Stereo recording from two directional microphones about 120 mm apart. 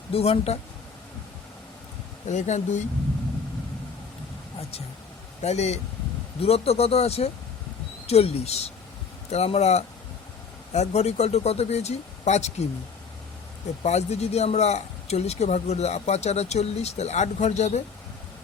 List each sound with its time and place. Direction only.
0.1 s speech: 55° left (ahead or behind)
2.2 s speech: 85° left
5.4 s speech: 65° left (ahead or behind)
13.8 s speech: 65° left (ahead or behind)